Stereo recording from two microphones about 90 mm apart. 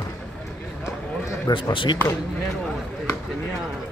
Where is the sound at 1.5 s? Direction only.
70° left (ahead or behind).